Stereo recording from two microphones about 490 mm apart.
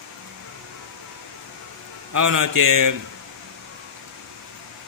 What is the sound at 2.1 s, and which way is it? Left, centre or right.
Speech, right.